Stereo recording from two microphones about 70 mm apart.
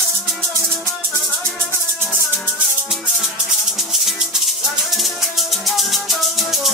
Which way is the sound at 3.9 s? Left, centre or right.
Centre.